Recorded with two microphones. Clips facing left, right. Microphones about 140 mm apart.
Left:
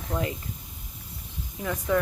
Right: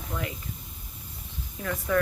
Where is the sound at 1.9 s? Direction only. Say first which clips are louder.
Even; 20° left (ahead or behind).